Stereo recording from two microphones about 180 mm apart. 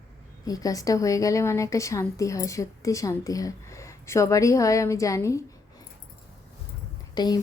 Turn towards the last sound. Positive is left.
turn(degrees=25)  # may be behind; listen again after turning